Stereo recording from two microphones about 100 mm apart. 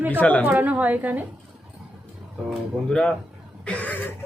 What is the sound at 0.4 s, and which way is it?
Speech, 15° right (ahead or behind).